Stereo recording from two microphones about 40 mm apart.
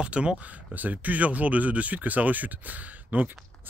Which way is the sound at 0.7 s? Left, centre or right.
Right.